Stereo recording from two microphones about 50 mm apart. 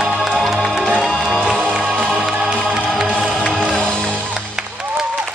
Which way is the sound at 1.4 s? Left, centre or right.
Right.